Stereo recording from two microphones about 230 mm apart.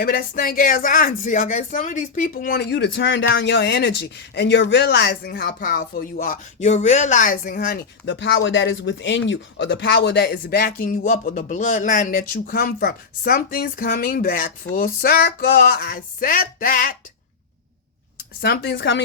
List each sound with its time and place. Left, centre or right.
0.0 s speech: left
18.4 s speech: left